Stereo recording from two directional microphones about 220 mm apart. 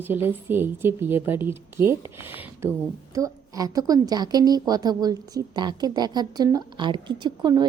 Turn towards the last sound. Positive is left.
turn(degrees=-20)  # may be behind; listen again after turning